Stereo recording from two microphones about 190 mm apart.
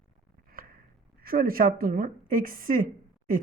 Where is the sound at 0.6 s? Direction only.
50° right (ahead or behind).